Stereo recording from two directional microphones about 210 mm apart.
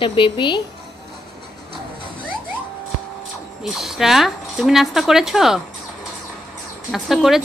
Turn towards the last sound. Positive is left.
turn(degrees=0)  # may be behind; listen again after turning